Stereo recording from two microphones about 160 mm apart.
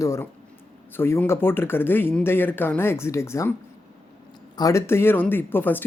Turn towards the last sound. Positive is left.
turn(degrees=10)  # may be behind; listen again after turning